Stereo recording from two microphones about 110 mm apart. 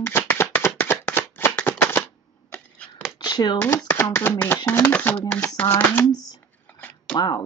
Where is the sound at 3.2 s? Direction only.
40° left (ahead or behind).